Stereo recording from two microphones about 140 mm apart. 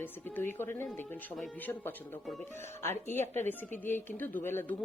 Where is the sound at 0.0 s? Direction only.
15° left (ahead or behind).